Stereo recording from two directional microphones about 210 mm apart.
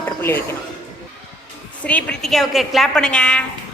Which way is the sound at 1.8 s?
5° left (ahead or behind).